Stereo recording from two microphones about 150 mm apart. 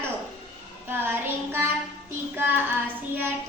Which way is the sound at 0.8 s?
15° right (ahead or behind).